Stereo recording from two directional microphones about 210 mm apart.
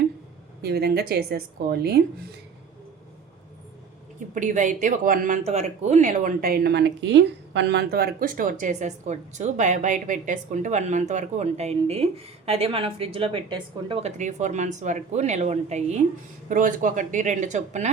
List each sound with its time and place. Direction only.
0.6 s a woman's voice: 50° right (ahead or behind)
4.4 s speech: 35° right (ahead or behind)